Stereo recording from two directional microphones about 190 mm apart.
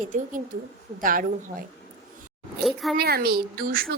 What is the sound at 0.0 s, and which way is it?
Speech, 45° right (ahead or behind).